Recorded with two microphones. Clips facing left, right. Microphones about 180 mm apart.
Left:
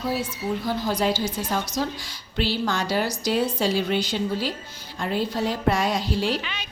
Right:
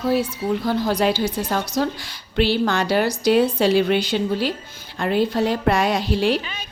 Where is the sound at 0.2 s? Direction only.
65° right (ahead or behind).